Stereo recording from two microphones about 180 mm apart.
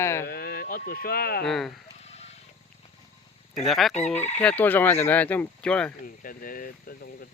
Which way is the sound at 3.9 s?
40° left (ahead or behind).